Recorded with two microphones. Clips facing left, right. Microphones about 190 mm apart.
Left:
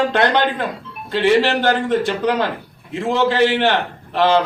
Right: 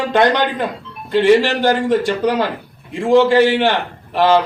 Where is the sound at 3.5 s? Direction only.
15° right (ahead or behind).